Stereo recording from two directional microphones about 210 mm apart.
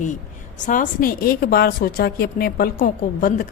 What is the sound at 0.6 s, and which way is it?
A woman's voice, 40° left (ahead or behind).